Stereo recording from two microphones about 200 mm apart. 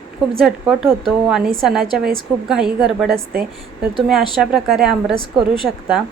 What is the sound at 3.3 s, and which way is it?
Speech, 50° right (ahead or behind).